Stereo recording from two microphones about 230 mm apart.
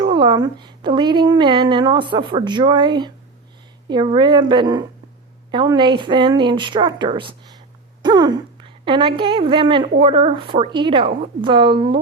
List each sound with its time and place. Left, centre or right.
0.0 s a woman's voice: right